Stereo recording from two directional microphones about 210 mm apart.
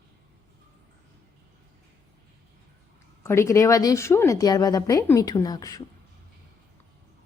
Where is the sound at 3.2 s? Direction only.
15° left (ahead or behind).